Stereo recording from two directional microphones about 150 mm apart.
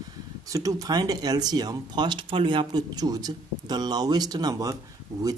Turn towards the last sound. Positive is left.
turn(degrees=-25)  # may be behind; listen again after turning